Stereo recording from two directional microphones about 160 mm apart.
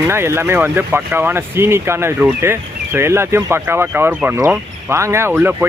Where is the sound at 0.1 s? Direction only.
15° right (ahead or behind).